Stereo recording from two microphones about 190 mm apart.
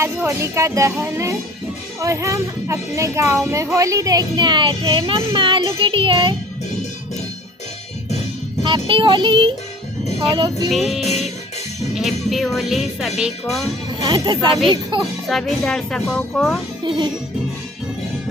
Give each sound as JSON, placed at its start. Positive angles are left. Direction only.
{"t": 0.0, "sound": "speech", "side_deg": -15}
{"t": 8.9, "sound": "speech", "side_deg": -25}
{"t": 10.7, "sound": "music", "side_deg": 0}
{"t": 14.0, "sound": "speech", "side_deg": -20}
{"t": 15.3, "sound": "music", "side_deg": 0}